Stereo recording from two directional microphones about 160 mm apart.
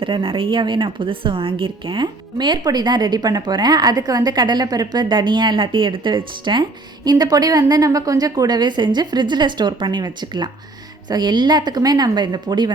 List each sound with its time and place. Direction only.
0.0 s a woman's voice: 30° right (ahead or behind)